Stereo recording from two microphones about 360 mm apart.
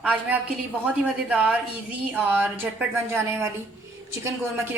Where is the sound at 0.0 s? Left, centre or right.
Centre.